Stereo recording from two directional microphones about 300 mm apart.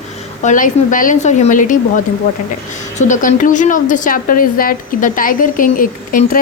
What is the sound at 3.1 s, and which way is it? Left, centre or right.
A woman's voice, left.